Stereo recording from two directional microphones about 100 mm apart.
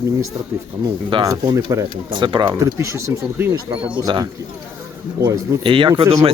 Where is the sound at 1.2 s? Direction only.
35° right (ahead or behind).